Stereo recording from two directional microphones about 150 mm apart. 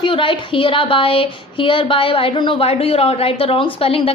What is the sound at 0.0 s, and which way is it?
Speech, 35° left (ahead or behind).